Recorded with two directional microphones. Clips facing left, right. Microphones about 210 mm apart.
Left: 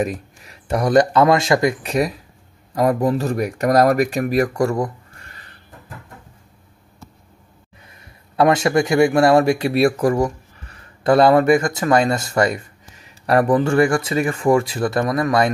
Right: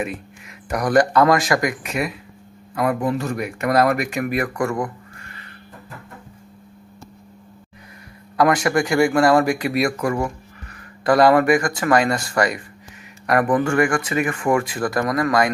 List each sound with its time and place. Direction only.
0.0 s speech: 35° left (ahead or behind)
8.4 s speech: 25° left (ahead or behind)